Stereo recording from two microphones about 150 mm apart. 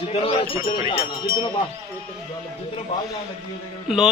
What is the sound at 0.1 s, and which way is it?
Speech, 40° left (ahead or behind).